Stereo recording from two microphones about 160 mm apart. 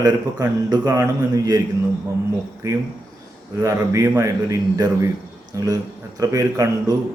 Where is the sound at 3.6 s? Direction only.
20° right (ahead or behind).